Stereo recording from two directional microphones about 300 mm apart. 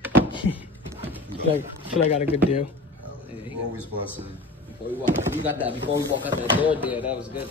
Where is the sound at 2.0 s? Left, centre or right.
Centre.